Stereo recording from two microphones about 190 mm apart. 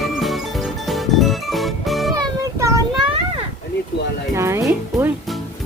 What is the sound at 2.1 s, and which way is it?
Music, 20° right (ahead or behind).